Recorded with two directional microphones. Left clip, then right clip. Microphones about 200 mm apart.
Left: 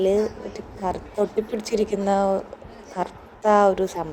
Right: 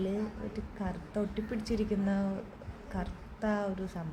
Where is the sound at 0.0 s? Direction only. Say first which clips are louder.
Left 15 dB; 35° left (ahead or behind).